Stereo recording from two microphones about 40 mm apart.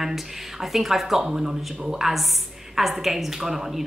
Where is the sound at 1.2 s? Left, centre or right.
Centre.